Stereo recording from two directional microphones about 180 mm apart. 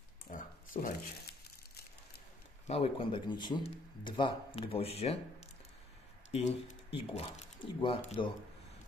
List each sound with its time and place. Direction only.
0.3 s a sound: 45° left (ahead or behind)
2.7 s a man's voice: 30° left (ahead or behind)
6.9 s speech: 35° left (ahead or behind)